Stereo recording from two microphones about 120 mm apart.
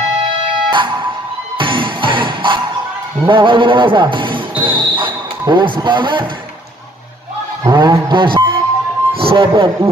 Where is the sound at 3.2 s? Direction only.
45° right (ahead or behind).